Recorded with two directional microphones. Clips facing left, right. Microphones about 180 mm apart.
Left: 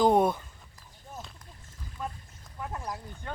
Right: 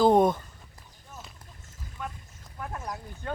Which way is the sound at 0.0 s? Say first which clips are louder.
Right 2 dB; 10° left (ahead or behind).